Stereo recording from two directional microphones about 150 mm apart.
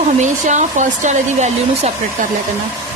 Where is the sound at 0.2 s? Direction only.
55° right (ahead or behind).